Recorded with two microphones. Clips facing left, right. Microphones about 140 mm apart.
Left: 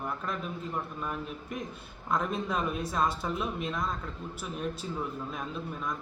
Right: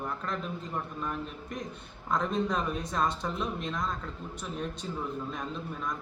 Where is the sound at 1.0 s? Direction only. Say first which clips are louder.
Even; 5° left (ahead or behind).